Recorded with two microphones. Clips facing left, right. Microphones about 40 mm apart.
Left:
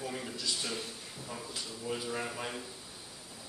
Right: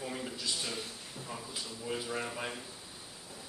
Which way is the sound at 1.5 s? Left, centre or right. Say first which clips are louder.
Left 1 dB; centre.